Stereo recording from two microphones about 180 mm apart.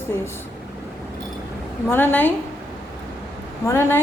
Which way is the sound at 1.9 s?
10° left (ahead or behind).